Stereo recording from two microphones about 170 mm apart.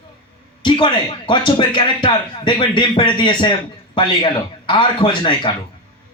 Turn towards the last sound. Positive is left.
turn(degrees=30)  # may be behind; listen again after turning